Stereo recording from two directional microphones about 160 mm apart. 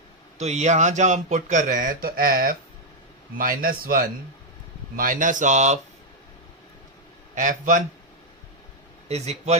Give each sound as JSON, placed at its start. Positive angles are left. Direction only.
{"t": 0.3, "sound": "a man's voice", "side_deg": -45}
{"t": 7.3, "sound": "speech", "side_deg": -55}
{"t": 9.0, "sound": "speech", "side_deg": -45}